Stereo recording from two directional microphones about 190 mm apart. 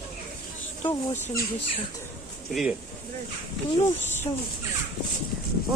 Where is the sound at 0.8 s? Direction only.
25° left (ahead or behind).